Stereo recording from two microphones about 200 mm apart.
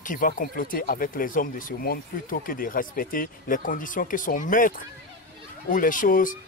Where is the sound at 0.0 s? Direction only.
40° left (ahead or behind).